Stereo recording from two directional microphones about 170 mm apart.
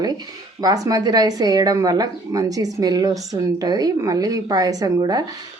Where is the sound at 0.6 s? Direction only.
20° right (ahead or behind).